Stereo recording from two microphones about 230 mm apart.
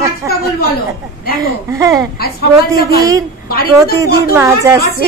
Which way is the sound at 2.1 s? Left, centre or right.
Left.